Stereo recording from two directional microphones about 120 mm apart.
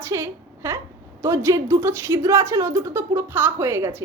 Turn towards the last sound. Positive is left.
turn(degrees=-20)  # may be behind; listen again after turning